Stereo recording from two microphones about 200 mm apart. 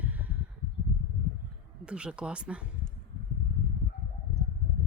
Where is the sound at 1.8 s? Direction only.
5° right (ahead or behind).